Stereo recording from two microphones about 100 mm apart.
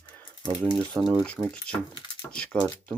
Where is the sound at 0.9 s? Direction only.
Centre (ahead or behind).